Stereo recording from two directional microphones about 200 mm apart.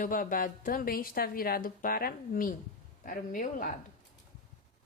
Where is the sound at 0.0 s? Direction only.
45° left (ahead or behind).